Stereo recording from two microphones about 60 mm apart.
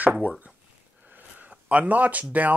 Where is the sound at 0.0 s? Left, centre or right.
Right.